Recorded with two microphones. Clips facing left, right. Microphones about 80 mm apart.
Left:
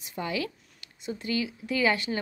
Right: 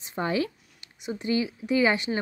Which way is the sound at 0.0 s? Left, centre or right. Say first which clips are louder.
Right 5 dB; right.